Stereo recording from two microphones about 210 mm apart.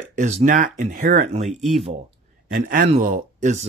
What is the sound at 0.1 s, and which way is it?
A man's voice, 35° right (ahead or behind).